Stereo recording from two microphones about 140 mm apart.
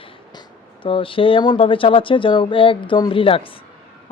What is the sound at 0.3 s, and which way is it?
Speech, 35° left (ahead or behind).